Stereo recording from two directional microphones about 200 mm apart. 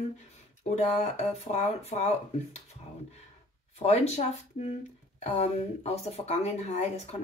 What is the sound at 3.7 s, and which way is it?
Speech, 35° left (ahead or behind).